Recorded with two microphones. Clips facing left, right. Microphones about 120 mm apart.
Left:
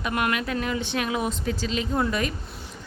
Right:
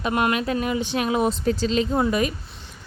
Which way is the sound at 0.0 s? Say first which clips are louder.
Right 4 dB; 25° right (ahead or behind).